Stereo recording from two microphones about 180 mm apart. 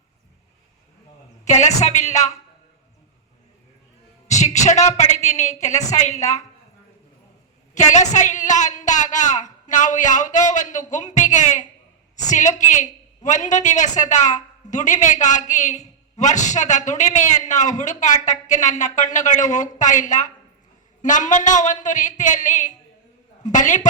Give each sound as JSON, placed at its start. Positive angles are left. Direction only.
{"t": 1.5, "sound": "a woman's voice", "side_deg": 40}
{"t": 4.3, "sound": "a woman's voice", "side_deg": 40}
{"t": 7.8, "sound": "a woman's voice", "side_deg": 40}